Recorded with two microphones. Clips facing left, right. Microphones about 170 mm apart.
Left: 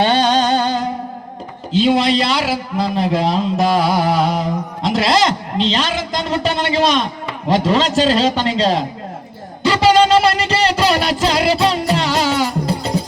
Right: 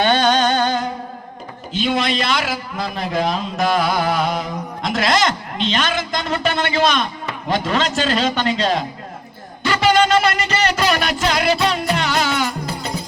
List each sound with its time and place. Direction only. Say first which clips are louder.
0.0 s music: left 1 dB; 35° left (ahead or behind)
1.7 s a man's voice: left 6 dB; 35° left (ahead or behind)
9.6 s music: left 4 dB; 35° left (ahead or behind)